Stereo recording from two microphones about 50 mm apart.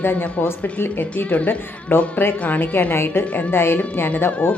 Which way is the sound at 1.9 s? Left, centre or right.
Left.